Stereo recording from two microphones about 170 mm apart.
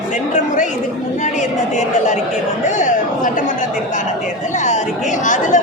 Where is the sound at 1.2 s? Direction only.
45° left (ahead or behind).